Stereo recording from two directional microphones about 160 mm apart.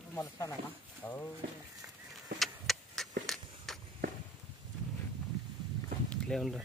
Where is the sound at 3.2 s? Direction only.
Centre (ahead or behind).